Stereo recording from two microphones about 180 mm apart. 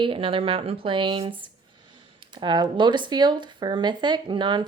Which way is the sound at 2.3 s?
25° right (ahead or behind).